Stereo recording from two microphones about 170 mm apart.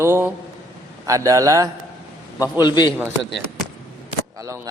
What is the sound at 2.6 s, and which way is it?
Speech, 25° left (ahead or behind).